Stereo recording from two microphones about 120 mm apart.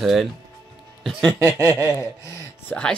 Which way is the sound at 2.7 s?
10° left (ahead or behind).